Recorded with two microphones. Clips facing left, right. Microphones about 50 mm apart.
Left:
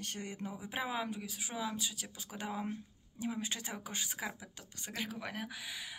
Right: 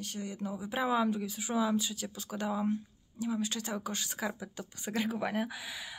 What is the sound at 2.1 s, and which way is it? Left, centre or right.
Speech, centre.